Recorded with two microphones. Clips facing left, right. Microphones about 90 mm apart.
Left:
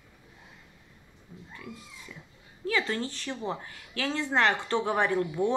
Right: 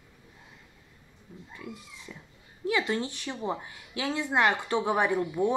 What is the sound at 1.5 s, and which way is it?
A woman's voice, 20° right (ahead or behind).